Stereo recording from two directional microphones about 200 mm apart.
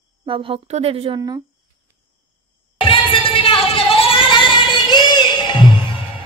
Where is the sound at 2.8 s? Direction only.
25° left (ahead or behind).